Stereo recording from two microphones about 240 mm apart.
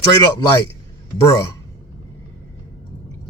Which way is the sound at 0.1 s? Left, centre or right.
Centre.